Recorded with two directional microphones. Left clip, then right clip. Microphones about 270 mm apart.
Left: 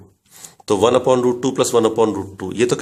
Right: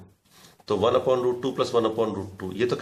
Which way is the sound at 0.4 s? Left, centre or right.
Left.